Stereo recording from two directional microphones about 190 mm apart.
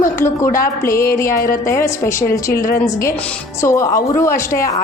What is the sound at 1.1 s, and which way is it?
A woman's voice, 15° left (ahead or behind).